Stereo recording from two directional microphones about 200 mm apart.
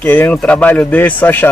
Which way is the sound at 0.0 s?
10° left (ahead or behind).